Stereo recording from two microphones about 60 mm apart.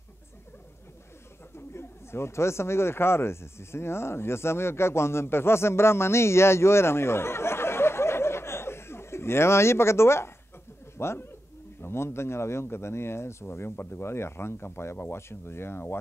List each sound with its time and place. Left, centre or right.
1.7 s speech: left